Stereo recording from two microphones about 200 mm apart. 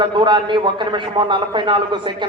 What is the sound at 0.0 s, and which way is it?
A man's voice, 25° right (ahead or behind).